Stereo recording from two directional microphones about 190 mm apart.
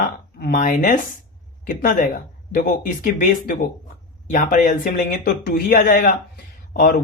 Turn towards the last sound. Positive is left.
turn(degrees=45)  # may be behind; listen again after turning